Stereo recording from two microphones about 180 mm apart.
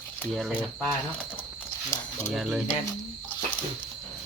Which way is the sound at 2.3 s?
Centre (ahead or behind).